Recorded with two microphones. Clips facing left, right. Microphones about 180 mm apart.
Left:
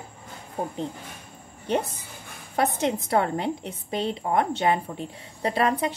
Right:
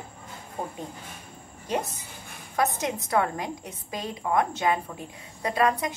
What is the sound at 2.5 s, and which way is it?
A woman's voice, 30° left (ahead or behind).